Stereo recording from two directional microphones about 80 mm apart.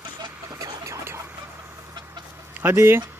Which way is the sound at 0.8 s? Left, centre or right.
Right.